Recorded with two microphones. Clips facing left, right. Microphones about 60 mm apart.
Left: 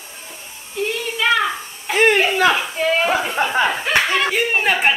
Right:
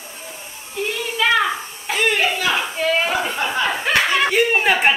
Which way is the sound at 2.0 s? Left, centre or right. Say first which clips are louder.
Left 5 dB; left.